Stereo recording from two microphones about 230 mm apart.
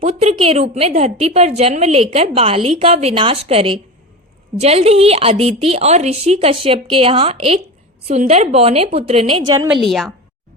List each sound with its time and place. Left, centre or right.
0.0 s a woman's voice: right
9.8 s a woman's voice: centre